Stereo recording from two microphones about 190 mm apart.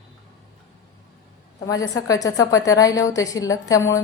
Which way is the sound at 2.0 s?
20° left (ahead or behind).